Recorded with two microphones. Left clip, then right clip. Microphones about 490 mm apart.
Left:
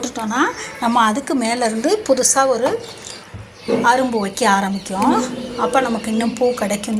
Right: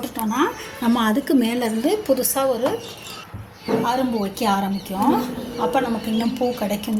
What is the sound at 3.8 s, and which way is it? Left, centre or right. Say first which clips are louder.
A woman's voice: left 10 dB; right.